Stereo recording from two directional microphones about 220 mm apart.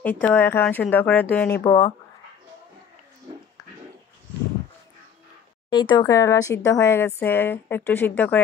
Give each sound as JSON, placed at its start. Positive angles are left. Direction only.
{"t": 0.0, "sound": "speech", "side_deg": 5}
{"t": 1.6, "sound": "speech", "side_deg": 20}
{"t": 5.7, "sound": "speech", "side_deg": 20}